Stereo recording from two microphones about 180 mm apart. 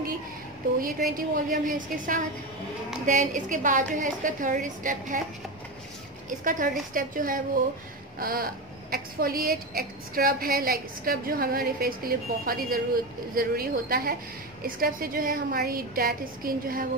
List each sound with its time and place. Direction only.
0.7 s a woman's voice: 50° right (ahead or behind)
6.4 s a woman's voice: 50° right (ahead or behind)